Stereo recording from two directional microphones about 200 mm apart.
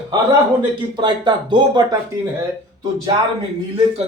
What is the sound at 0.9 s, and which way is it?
Speech, 20° right (ahead or behind).